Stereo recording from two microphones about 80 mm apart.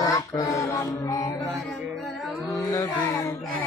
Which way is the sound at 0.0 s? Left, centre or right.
Left.